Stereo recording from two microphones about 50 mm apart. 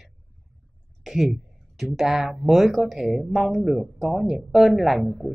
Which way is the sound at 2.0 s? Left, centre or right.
Centre.